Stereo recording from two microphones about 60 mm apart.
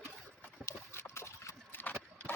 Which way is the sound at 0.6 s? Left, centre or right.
Left.